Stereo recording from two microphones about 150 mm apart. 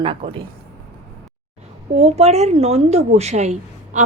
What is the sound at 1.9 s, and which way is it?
A woman's voice, 45° right (ahead or behind).